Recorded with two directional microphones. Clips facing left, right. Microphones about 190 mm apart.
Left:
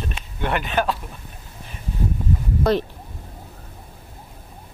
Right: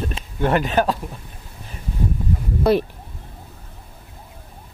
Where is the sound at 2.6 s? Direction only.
10° right (ahead or behind).